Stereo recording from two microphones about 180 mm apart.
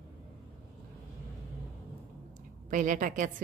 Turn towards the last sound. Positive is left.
turn(degrees=-45)  # may be behind; listen again after turning